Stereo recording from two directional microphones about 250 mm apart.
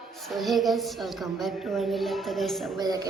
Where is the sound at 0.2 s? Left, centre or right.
Centre.